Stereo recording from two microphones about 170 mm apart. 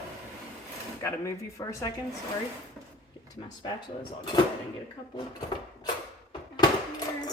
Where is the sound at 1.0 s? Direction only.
15° left (ahead or behind).